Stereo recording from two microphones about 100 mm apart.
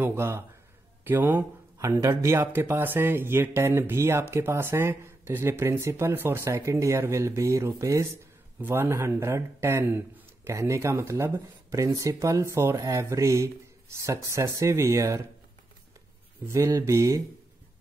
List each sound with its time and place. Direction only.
0.0 s speech: 25° right (ahead or behind)
1.8 s speech: 30° right (ahead or behind)
16.4 s speech: 30° right (ahead or behind)